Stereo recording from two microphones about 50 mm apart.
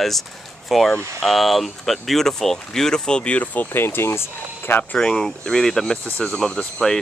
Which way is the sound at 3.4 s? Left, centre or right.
Left.